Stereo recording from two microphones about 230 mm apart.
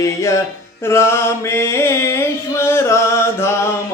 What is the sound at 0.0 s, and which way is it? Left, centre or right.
Mantra, centre.